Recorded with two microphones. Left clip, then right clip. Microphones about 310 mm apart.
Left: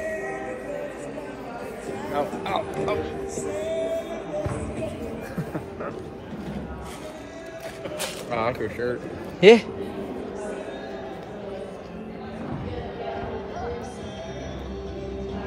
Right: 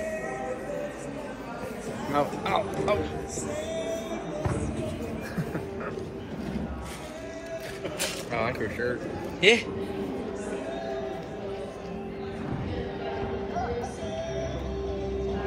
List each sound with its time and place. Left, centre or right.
2.1 s speech: right
3.3 s music: left
8.0 s a man's voice: left